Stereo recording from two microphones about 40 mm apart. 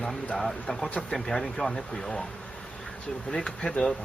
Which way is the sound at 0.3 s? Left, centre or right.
Centre.